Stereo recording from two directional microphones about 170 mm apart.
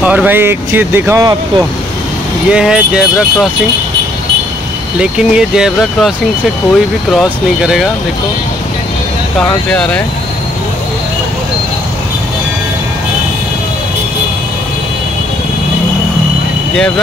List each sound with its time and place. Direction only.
0.0 s speech: 10° right (ahead or behind)
2.5 s speech: 5° right (ahead or behind)
5.0 s speech: 5° right (ahead or behind)
9.4 s speech: 5° left (ahead or behind)